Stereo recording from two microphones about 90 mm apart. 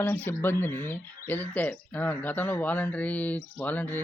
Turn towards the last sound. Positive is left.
turn(degrees=20)  # may be behind; listen again after turning